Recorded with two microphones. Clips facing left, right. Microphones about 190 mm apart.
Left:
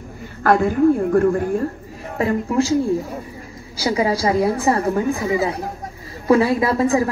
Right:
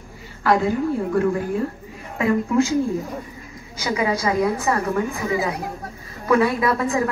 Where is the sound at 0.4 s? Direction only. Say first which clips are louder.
Left 4 dB; 50° left (ahead or behind).